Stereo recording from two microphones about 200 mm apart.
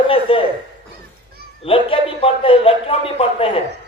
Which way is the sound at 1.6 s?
25° left (ahead or behind).